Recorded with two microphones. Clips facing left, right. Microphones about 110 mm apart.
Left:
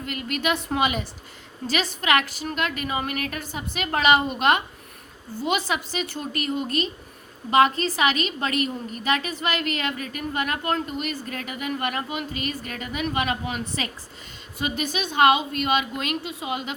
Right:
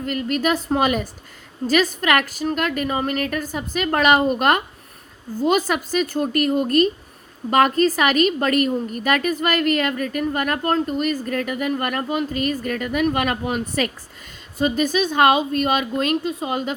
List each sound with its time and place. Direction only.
0.0 s a woman's voice: 40° right (ahead or behind)